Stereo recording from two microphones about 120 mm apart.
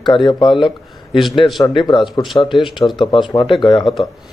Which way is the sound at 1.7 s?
40° left (ahead or behind).